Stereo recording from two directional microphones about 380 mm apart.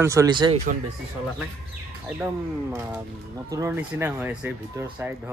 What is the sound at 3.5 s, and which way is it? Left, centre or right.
Speech, centre.